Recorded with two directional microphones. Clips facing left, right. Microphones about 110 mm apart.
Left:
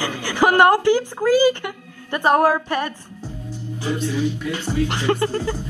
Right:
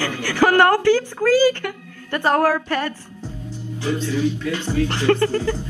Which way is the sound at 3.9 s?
15° left (ahead or behind).